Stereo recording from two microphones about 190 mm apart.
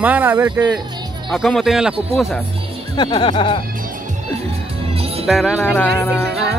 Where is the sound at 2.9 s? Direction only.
25° left (ahead or behind).